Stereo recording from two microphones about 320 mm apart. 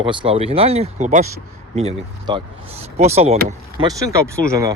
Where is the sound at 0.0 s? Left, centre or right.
Centre.